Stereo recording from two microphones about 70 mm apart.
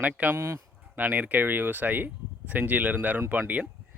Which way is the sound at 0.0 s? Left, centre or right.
Right.